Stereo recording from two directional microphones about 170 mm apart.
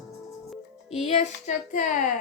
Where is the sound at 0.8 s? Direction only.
35° left (ahead or behind).